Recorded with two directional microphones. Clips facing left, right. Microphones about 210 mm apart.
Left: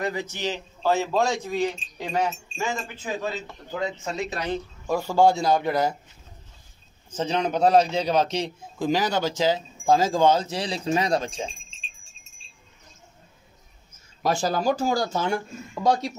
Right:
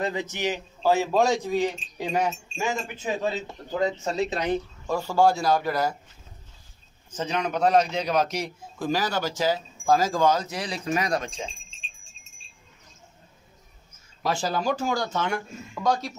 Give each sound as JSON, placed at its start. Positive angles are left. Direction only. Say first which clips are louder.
{"t": 0.0, "sound": "a man's voice", "louder": "right 1 dB", "side_deg": -20}
{"t": 3.8, "sound": "speech", "louder": "right 4 dB", "side_deg": -40}
{"t": 4.3, "sound": "speech", "louder": "right 3 dB", "side_deg": -20}
{"t": 4.8, "sound": "a man's voice", "louder": "left 2 dB", "side_deg": 15}
{"t": 7.2, "sound": "a man's voice", "louder": "left 3 dB", "side_deg": 30}
{"t": 14.2, "sound": "speech", "louder": "left 3 dB", "side_deg": 45}